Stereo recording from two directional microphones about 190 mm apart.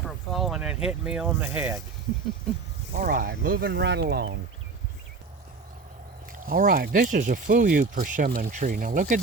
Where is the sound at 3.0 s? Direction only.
55° right (ahead or behind).